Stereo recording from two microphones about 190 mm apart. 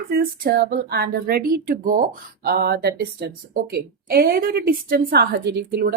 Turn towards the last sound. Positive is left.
turn(degrees=-60)  # may be behind; listen again after turning